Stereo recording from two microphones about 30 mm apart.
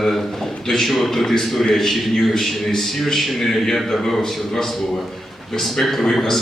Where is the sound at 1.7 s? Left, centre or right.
Centre.